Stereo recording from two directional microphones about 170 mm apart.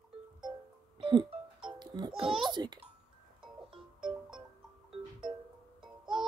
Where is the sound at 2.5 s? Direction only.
25° right (ahead or behind).